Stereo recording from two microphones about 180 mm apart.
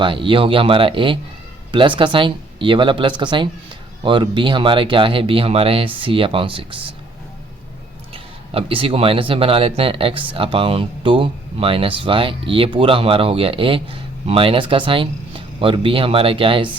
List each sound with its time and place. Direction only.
0.0 s speech: 30° right (ahead or behind)
8.1 s speech: 30° right (ahead or behind)